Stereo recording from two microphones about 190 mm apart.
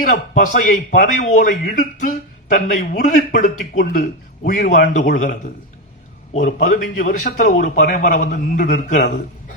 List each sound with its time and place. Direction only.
0.0 s a man's voice: 40° left (ahead or behind)
6.3 s a man's voice: 40° left (ahead or behind)